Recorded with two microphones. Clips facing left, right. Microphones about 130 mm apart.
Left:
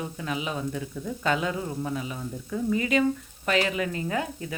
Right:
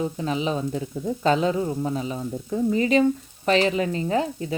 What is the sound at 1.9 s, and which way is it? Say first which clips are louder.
Stir: right 5 dB; 30° right (ahead or behind).